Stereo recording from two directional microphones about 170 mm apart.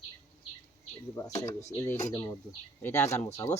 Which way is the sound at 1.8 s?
20° left (ahead or behind).